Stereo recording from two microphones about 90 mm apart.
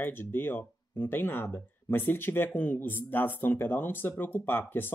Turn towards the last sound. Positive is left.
turn(degrees=25)  # may be behind; listen again after turning